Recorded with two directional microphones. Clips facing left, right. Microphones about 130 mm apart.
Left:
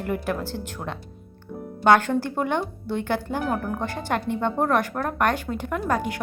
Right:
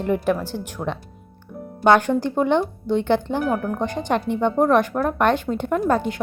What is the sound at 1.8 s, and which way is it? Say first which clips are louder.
A woman's voice: right 2 dB; 20° right (ahead or behind).